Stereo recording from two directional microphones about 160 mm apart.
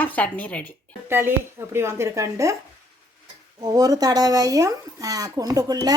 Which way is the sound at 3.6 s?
25° right (ahead or behind).